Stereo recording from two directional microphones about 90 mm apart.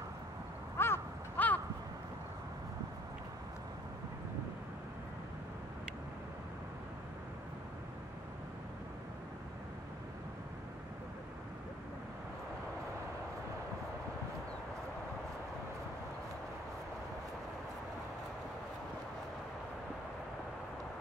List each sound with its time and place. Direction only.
0.7 s crow: 25° left (ahead or behind)